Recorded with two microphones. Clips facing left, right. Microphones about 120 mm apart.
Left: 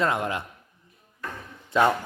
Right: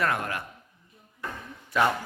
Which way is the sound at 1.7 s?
25° left (ahead or behind).